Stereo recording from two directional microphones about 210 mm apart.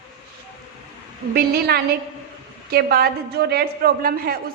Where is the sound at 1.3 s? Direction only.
45° right (ahead or behind).